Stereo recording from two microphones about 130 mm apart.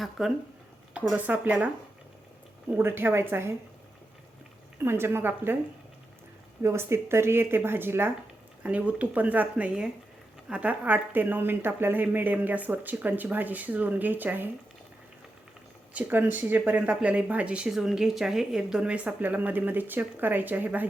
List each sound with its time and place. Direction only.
0.0 s speech: centre (ahead or behind); by 3.5 s 20° right (ahead or behind)
4.8 s speech: 20° right (ahead or behind)
6.6 s speech: 20° right (ahead or behind)
15.9 s speech: 15° right (ahead or behind)